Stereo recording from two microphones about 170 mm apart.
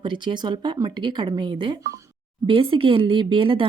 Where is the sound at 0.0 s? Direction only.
25° right (ahead or behind).